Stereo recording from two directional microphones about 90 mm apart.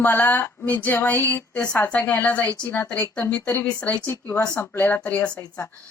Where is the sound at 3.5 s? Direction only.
30° left (ahead or behind); by 5.4 s 15° left (ahead or behind).